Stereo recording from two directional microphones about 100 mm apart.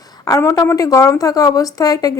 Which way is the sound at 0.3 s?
35° left (ahead or behind).